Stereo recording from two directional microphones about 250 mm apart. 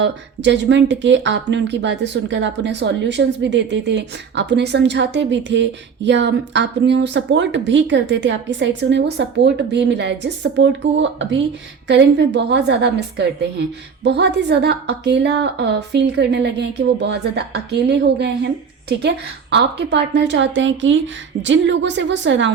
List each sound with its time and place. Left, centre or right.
0.0 s speech: right